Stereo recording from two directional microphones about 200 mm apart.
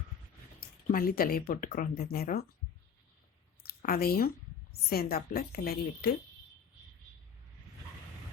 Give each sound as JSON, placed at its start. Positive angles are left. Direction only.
{"t": 0.6, "sound": "speech", "side_deg": 45}
{"t": 3.6, "sound": "a sound", "side_deg": 50}
{"t": 4.7, "sound": "speech", "side_deg": 50}